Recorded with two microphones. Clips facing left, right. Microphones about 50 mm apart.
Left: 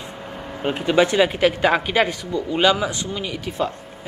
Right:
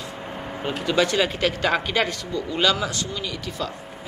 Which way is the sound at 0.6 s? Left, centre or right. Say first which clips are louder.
Left 4 dB; left.